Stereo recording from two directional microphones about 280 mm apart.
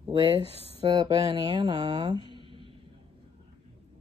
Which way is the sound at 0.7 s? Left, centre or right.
Centre.